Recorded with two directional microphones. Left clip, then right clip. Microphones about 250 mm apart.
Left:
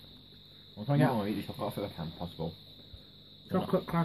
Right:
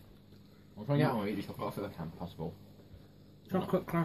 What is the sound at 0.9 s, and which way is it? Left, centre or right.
Speech, left.